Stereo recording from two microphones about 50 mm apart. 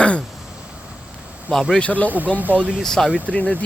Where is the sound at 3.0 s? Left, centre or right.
Right.